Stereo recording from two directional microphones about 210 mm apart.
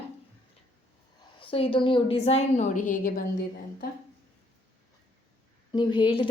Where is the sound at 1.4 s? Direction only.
25° left (ahead or behind); by 3.2 s 40° left (ahead or behind).